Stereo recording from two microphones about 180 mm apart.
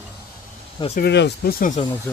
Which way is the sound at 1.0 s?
70° left (ahead or behind).